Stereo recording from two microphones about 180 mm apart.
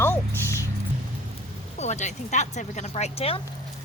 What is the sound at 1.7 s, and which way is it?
Speech, 40° left (ahead or behind).